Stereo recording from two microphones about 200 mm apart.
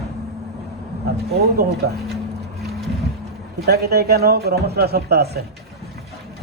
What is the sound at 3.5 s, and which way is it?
A man's voice, 55° right (ahead or behind).